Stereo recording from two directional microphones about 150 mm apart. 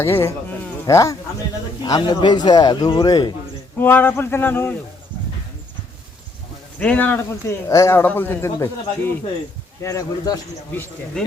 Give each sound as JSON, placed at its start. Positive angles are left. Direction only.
{"t": 0.0, "sound": "speech", "side_deg": 15}
{"t": 3.8, "sound": "speech", "side_deg": 15}
{"t": 6.7, "sound": "speech", "side_deg": 10}
{"t": 9.8, "sound": "speech", "side_deg": 20}